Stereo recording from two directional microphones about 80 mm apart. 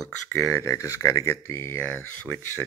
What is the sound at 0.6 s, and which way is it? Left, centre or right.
Speech, left.